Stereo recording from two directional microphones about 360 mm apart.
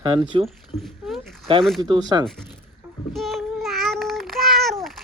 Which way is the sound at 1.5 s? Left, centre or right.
Centre.